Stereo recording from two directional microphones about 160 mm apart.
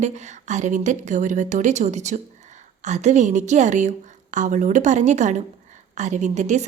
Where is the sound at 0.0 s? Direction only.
45° right (ahead or behind).